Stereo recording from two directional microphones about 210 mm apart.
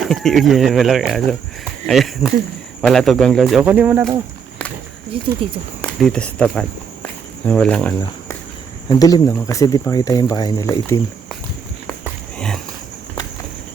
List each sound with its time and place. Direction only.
0.1 s speech: centre (ahead or behind)
5.1 s speech: 25° right (ahead or behind)
5.8 s speech: 5° left (ahead or behind)
9.0 s speech: 15° left (ahead or behind)